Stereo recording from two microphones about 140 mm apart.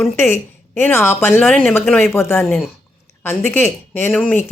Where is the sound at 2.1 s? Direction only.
20° left (ahead or behind).